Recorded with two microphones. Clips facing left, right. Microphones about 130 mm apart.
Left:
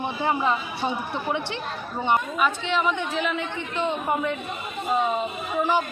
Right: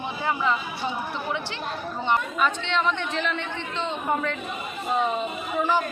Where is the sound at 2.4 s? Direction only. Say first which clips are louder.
Left 1 dB; 10° left (ahead or behind).